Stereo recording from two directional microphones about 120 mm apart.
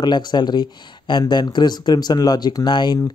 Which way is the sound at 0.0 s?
35° left (ahead or behind).